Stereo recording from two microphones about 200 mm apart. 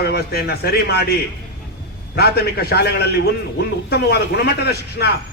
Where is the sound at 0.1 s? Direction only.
50° left (ahead or behind).